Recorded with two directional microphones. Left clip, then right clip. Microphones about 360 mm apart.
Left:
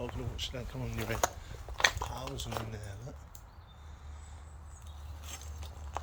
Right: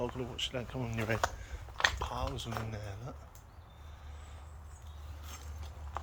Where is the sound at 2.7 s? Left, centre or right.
Centre.